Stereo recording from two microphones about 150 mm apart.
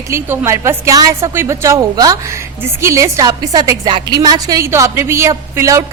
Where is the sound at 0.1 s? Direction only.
20° right (ahead or behind).